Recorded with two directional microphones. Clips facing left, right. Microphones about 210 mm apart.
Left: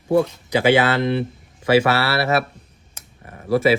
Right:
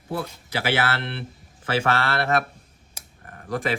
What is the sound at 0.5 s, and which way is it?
Speech, 15° left (ahead or behind).